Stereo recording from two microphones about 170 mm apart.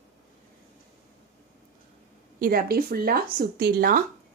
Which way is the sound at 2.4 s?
60° right (ahead or behind).